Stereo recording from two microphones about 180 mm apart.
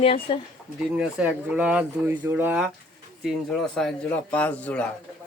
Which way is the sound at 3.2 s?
Centre (ahead or behind).